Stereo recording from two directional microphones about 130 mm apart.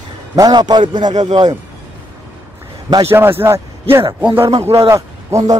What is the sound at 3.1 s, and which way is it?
A man's voice, 15° right (ahead or behind).